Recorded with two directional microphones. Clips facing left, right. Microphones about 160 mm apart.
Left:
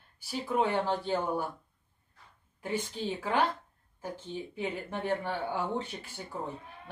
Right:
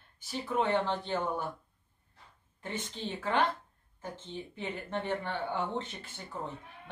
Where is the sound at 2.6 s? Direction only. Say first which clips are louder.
Left 5 dB; 10° left (ahead or behind).